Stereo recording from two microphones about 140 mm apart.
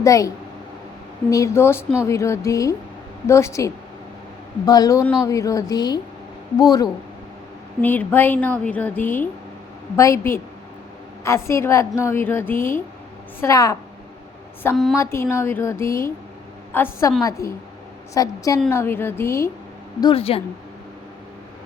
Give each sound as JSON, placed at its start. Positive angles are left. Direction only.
{"t": 0.0, "sound": "a woman's voice", "side_deg": 25}
{"t": 7.8, "sound": "a woman's voice", "side_deg": 15}
{"t": 14.9, "sound": "a woman's voice", "side_deg": 20}
{"t": 20.0, "sound": "a woman's voice", "side_deg": 40}